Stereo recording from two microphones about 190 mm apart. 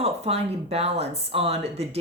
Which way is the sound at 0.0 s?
30° right (ahead or behind).